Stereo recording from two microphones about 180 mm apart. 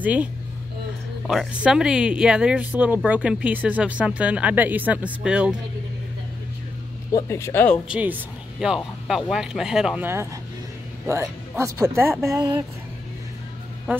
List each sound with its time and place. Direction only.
0.0 s speech: 10° right (ahead or behind)
7.1 s speech: 20° left (ahead or behind)
7.9 s speech: 5° right (ahead or behind)
13.9 s speech: 10° right (ahead or behind)